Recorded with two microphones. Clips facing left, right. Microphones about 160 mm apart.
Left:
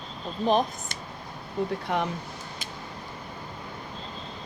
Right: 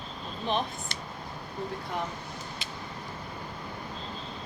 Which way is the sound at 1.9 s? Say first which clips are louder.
Left 6 dB; 80° left.